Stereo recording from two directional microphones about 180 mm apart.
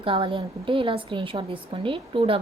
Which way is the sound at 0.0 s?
30° right (ahead or behind).